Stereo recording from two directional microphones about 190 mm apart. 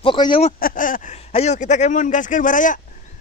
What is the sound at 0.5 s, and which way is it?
Speech, 45° left (ahead or behind).